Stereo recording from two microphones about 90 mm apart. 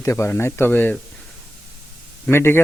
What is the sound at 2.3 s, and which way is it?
Speech, 25° left (ahead or behind).